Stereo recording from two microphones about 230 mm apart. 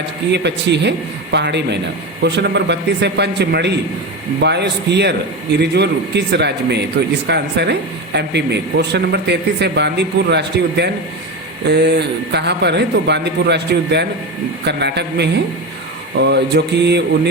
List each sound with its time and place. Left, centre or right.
0.3 s speech: right